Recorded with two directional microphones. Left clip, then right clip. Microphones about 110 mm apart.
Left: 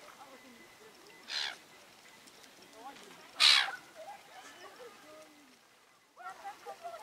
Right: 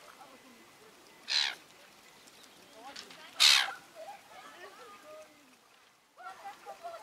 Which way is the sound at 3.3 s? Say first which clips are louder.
Right 1 dB; 15° right (ahead or behind).